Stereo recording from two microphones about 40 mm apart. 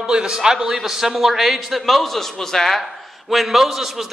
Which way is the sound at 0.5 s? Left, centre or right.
Centre.